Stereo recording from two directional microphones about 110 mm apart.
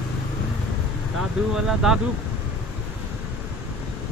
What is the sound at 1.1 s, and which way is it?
Speech, 5° right (ahead or behind).